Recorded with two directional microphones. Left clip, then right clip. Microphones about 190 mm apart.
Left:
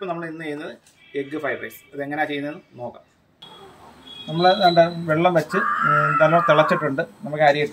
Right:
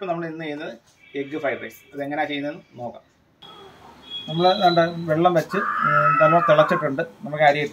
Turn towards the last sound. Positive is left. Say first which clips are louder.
# even
turn(degrees=15)  # may be behind; listen again after turning